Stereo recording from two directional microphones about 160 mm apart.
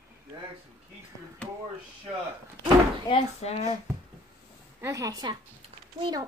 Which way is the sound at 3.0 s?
40° left (ahead or behind).